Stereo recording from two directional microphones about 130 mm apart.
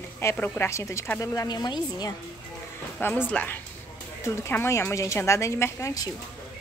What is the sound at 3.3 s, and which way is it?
A woman's voice, 10° left (ahead or behind).